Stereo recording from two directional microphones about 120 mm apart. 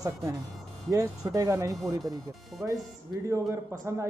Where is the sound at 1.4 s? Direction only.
25° right (ahead or behind).